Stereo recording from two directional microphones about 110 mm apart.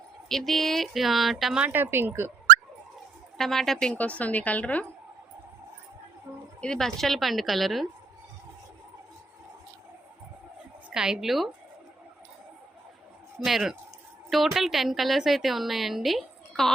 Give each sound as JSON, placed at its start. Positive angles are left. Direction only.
{"t": 0.3, "sound": "a woman's voice", "side_deg": 0}
{"t": 1.6, "sound": "speech", "side_deg": -20}
{"t": 3.3, "sound": "a woman's voice", "side_deg": 5}
{"t": 6.6, "sound": "a woman's voice", "side_deg": 5}
{"t": 10.8, "sound": "a woman's voice", "side_deg": -5}
{"t": 13.4, "sound": "a woman's voice", "side_deg": -5}